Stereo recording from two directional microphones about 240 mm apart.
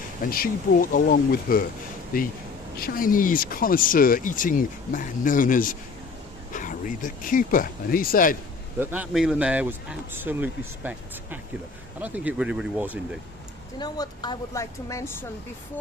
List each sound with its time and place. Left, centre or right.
0.3 s speech: left
8.8 s speech: centre
13.7 s speech: centre